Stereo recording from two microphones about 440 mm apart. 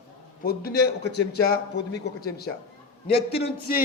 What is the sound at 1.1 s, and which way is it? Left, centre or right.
A man's voice, left.